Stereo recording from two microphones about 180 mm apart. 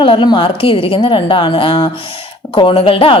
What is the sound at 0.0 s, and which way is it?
A woman's voice, 25° left (ahead or behind).